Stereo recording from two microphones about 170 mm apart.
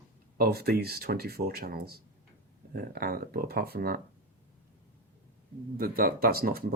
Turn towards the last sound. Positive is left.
turn(degrees=-60)  # may be behind; listen again after turning